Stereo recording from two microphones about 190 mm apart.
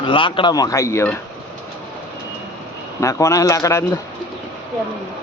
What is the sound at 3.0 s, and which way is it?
Speech, 15° left (ahead or behind).